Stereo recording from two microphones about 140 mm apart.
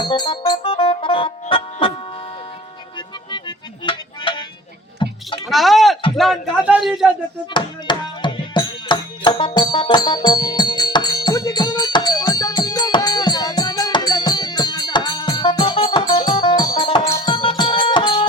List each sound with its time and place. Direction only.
0.0 s music: 35° left (ahead or behind)
3.3 s music: 35° left (ahead or behind)
5.5 s a sound: centre (ahead or behind)
7.5 s music: 35° left (ahead or behind)
17.1 s music: 20° left (ahead or behind)
17.3 s music: 40° left (ahead or behind)